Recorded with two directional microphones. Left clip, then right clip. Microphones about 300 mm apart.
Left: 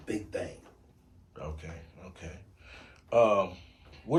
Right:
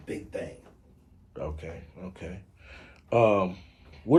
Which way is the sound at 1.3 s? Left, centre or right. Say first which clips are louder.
Right 6 dB; right.